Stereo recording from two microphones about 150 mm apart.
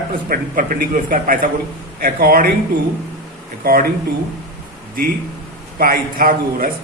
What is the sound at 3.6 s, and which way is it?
Speech, 80° right.